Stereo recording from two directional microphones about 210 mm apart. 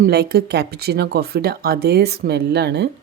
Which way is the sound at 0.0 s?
50° right (ahead or behind).